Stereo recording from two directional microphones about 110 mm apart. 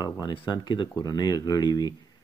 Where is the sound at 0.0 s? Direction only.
40° left (ahead or behind).